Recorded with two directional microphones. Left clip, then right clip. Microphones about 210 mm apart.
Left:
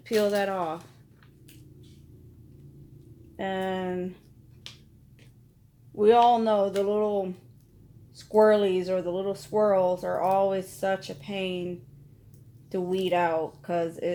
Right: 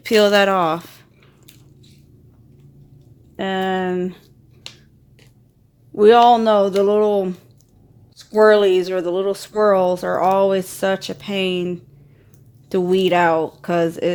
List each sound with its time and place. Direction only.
0.0 s speech: 50° right (ahead or behind)
3.3 s speech: 45° right (ahead or behind)
5.9 s speech: 50° right (ahead or behind)